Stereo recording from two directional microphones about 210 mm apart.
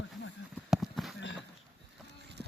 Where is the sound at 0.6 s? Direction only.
Centre (ahead or behind).